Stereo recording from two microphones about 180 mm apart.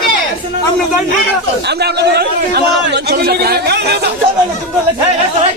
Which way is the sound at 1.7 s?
65° right (ahead or behind).